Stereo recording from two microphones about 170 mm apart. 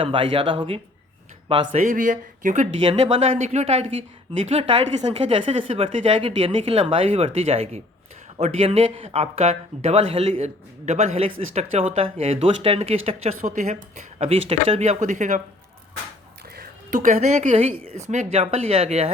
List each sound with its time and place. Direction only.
0.0 s speech: 30° right (ahead or behind)
1.7 s speech: 45° right (ahead or behind)
2.8 s speech: 35° right (ahead or behind)
16.6 s a woman's voice: 50° right (ahead or behind)